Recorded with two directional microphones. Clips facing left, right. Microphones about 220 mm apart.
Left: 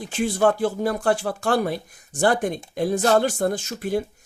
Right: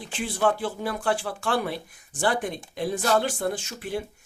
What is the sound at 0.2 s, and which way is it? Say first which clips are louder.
Speech: left 5 dB; 45° left (ahead or behind).